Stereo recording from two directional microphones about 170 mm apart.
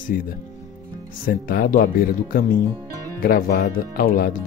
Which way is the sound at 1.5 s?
55° left (ahead or behind).